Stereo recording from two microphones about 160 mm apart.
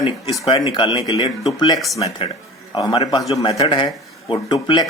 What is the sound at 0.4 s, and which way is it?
Speech, 30° left (ahead or behind).